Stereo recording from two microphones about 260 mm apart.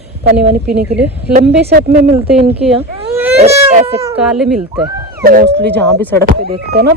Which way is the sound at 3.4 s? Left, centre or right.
Right.